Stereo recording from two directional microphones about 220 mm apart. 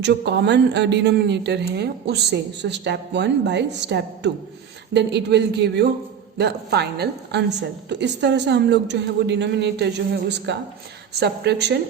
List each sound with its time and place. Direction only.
0.0 s speech: 50° right (ahead or behind)